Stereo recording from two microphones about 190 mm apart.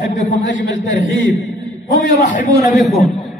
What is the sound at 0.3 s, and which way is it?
Speech, 80° left.